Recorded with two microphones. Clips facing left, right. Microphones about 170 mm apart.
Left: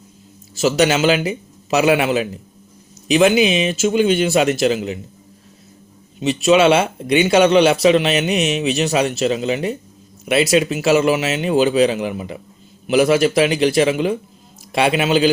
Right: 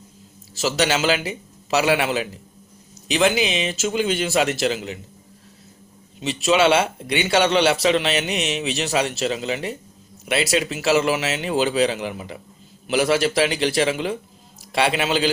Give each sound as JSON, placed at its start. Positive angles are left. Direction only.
{"t": 0.6, "sound": "speech", "side_deg": 20}
{"t": 3.2, "sound": "speech", "side_deg": 15}
{"t": 6.1, "sound": "speech", "side_deg": 20}